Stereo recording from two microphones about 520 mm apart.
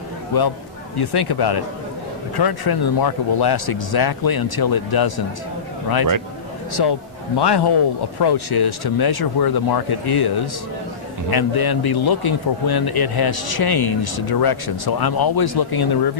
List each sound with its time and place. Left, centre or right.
0.3 s speech: left
6.7 s a man's voice: left